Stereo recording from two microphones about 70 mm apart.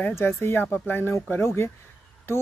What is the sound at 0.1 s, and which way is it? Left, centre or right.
Speech, left.